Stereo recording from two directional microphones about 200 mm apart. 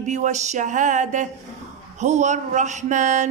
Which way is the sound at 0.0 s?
35° right (ahead or behind).